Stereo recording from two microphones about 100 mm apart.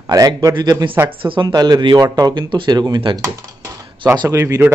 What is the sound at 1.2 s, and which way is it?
Speech, 55° right (ahead or behind).